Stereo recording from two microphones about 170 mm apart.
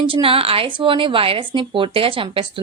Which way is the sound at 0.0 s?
30° right (ahead or behind).